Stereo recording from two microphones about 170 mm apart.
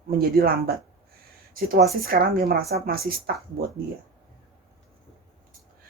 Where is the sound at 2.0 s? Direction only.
60° right (ahead or behind).